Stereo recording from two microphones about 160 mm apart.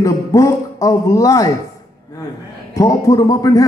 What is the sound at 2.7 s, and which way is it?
Speech, 20° left (ahead or behind).